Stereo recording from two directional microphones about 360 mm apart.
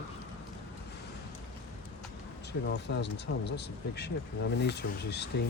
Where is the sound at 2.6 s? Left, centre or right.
Left.